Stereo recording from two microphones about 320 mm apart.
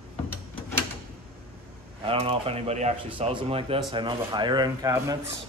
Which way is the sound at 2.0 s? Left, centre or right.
Centre.